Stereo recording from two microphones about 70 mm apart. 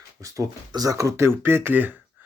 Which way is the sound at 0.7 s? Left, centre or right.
Right.